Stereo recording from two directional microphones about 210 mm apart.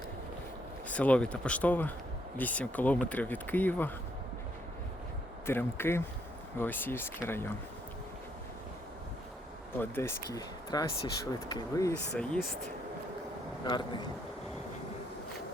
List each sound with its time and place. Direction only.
0.9 s speech: 5° left (ahead or behind)
5.5 s speech: 10° left (ahead or behind)
9.7 s speech: 10° left (ahead or behind)
12.1 s speech: 5° left (ahead or behind)
13.7 s speech: 20° left (ahead or behind)